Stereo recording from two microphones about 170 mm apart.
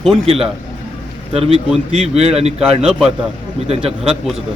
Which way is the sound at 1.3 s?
35° right (ahead or behind).